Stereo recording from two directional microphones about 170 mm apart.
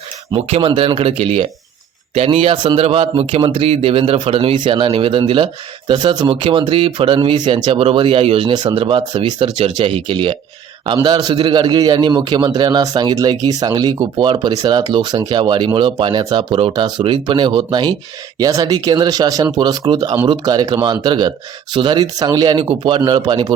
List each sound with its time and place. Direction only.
0.3 s a man's voice: 35° right (ahead or behind)